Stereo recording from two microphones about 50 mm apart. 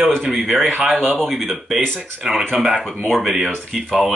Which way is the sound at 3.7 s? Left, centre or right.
Centre.